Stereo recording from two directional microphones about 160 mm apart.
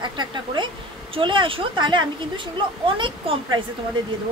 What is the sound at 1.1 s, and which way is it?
A woman's voice, 30° right (ahead or behind).